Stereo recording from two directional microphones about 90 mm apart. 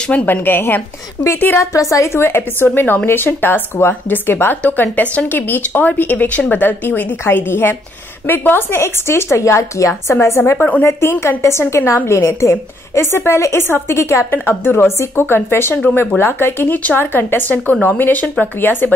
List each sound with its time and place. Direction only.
0.1 s a woman's voice: 20° left (ahead or behind)
1.7 s a woman's voice: 35° left (ahead or behind)